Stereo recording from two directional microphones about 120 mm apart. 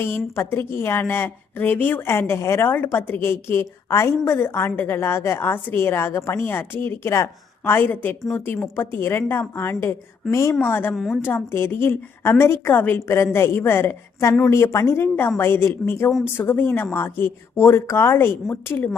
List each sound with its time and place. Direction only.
0.3 s a woman's voice: 20° left (ahead or behind)
10.9 s a woman's voice: centre (ahead or behind)
11.2 s a woman's voice: 20° left (ahead or behind)